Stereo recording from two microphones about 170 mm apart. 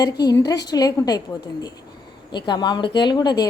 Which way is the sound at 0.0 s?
20° left (ahead or behind).